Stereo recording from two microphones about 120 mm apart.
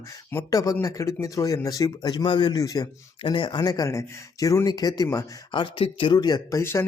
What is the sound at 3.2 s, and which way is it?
Speech, 45° left (ahead or behind).